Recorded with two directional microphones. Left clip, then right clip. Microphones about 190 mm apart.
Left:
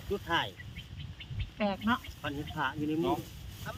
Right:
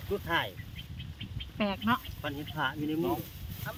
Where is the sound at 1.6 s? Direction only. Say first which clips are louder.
Right 1 dB; 20° right (ahead or behind).